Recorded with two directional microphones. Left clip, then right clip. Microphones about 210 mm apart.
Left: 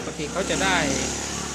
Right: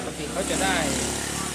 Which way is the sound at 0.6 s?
20° left (ahead or behind).